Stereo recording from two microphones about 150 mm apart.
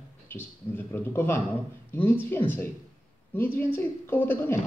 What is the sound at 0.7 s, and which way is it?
Speech, 15° left (ahead or behind).